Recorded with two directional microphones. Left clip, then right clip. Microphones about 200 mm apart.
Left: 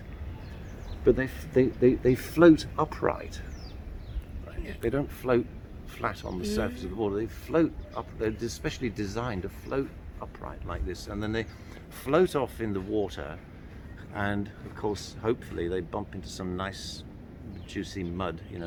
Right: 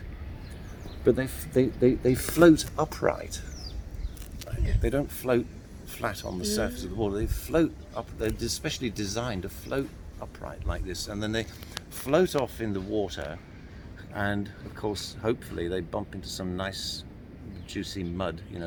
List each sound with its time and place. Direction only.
1.0 s speech: 45° right (ahead or behind)
4.8 s speech: 35° right (ahead or behind)